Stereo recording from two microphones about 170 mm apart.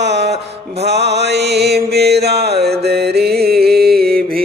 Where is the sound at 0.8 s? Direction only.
80° right.